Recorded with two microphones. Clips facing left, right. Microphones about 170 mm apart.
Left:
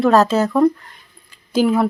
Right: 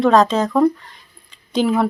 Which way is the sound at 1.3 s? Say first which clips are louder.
Left 2 dB; 5° left (ahead or behind).